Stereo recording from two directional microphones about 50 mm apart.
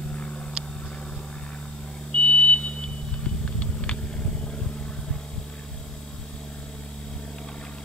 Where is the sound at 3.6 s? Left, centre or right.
Left.